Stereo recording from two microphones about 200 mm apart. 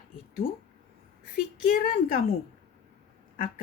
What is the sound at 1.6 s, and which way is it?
Speech, 45° left (ahead or behind).